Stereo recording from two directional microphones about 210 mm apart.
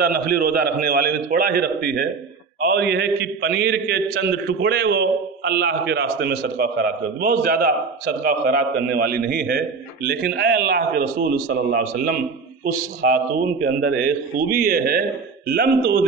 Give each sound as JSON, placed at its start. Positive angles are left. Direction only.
{"t": 0.0, "sound": "a man's voice", "side_deg": -45}